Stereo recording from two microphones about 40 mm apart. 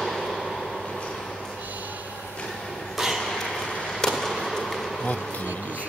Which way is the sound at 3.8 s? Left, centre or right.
Centre.